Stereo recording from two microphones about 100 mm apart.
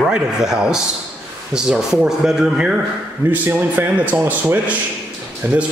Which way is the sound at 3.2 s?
20° right (ahead or behind).